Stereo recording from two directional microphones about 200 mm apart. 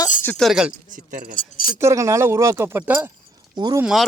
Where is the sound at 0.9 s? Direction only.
40° right (ahead or behind).